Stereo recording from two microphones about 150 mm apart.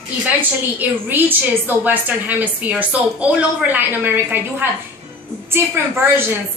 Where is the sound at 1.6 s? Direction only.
10° right (ahead or behind).